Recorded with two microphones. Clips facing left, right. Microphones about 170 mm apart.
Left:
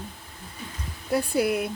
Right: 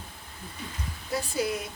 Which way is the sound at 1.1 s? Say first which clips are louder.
Left 6 dB; 60° left (ahead or behind).